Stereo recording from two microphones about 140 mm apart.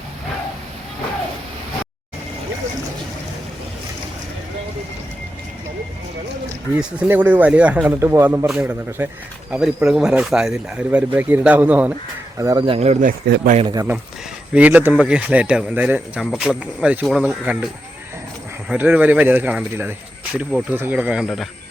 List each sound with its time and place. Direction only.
6.7 s speech: 10° right (ahead or behind)
7.9 s speech: 20° right (ahead or behind)
9.5 s speech: 5° right (ahead or behind)
12.4 s speech: 25° right (ahead or behind)
12.6 s speech: 45° right (ahead or behind)
13.1 s a man's voice: 85° right
14.5 s speech: 10° right (ahead or behind)
18.7 s speech: 10° right (ahead or behind)